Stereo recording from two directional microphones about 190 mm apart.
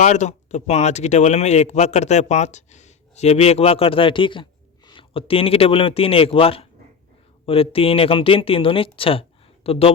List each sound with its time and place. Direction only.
0.0 s speech: 40° left (ahead or behind)